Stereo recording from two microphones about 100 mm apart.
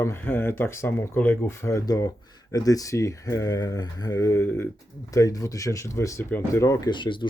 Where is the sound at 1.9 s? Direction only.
40° left (ahead or behind).